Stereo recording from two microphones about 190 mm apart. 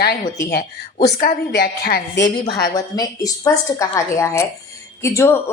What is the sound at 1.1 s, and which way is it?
A woman's voice, 50° left (ahead or behind).